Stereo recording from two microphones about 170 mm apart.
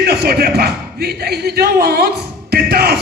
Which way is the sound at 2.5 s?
65° right (ahead or behind).